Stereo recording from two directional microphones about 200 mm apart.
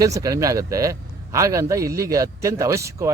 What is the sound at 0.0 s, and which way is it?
Speech, 15° right (ahead or behind).